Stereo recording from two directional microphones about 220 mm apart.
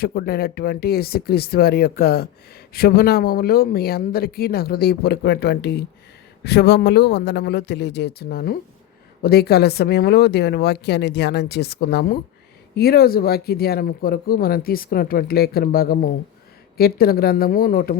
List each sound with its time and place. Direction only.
0.0 s speech: 45° left (ahead or behind)